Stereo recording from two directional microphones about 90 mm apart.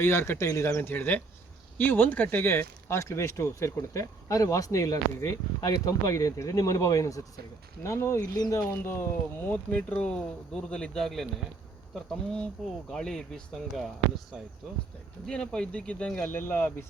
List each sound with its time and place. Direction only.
0.0 s speech: 25° left (ahead or behind)
0.8 s speech: 20° left (ahead or behind)
8.2 s speech: 45° left (ahead or behind); by 9.0 s 30° left (ahead or behind)
9.5 s speech: 15° left (ahead or behind)
12.9 s speech: 5° left (ahead or behind)
15.3 s speech: 10° left (ahead or behind)
16.3 s speech: 25° left (ahead or behind)